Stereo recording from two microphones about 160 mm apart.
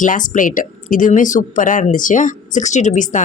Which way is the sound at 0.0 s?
55° left (ahead or behind).